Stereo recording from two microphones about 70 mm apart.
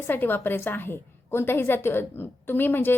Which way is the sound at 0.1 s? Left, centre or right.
Left.